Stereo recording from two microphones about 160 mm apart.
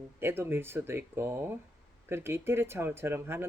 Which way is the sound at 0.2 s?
15° right (ahead or behind).